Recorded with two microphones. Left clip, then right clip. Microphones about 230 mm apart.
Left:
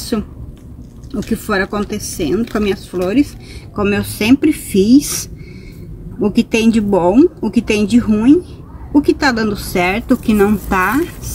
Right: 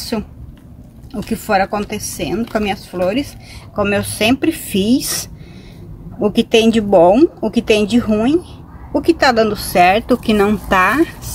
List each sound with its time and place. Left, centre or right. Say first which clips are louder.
1.3 s speech: right 2 dB; right